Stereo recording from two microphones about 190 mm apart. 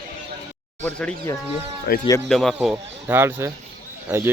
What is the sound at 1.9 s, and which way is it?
Speech, 55° left (ahead or behind).